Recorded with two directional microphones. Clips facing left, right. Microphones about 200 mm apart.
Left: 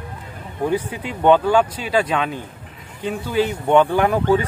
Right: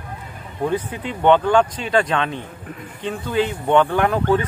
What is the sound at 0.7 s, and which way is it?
Speech, 10° left (ahead or behind).